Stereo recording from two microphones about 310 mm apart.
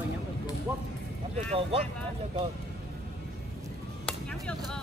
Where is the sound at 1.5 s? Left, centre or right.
Centre.